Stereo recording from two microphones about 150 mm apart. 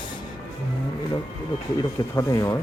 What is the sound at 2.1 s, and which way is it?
Speech, 20° left (ahead or behind).